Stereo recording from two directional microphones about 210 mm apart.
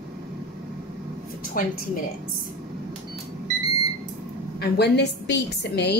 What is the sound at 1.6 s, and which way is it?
Speech, 40° left (ahead or behind).